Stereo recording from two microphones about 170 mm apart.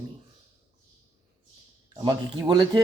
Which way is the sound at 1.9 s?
25° right (ahead or behind).